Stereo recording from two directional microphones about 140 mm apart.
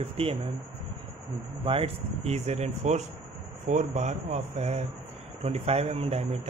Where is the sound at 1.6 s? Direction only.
40° right (ahead or behind).